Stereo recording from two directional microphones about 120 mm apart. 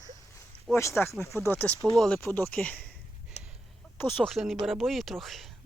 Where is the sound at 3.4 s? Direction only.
70° left (ahead or behind).